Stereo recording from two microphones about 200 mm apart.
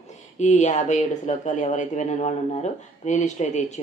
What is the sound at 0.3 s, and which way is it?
Speech, 35° left (ahead or behind).